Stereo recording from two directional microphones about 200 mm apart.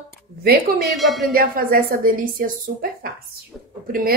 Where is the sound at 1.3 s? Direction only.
45° right (ahead or behind).